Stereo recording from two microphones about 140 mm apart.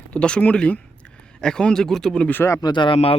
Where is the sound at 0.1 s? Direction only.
5° left (ahead or behind).